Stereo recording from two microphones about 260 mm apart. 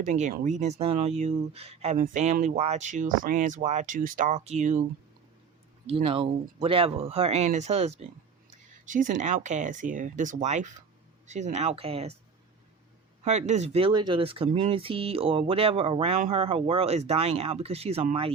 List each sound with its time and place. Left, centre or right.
0.0 s speech: right
5.8 s speech: right
13.2 s speech: right